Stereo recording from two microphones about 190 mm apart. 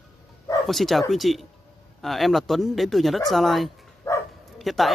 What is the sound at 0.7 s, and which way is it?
Speech, centre (ahead or behind).